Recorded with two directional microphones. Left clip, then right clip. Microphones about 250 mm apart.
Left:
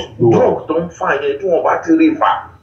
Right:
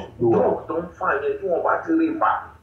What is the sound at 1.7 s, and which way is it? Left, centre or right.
Speech, left.